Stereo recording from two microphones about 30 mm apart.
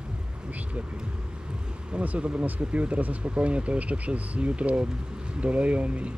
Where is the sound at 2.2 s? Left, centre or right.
Right.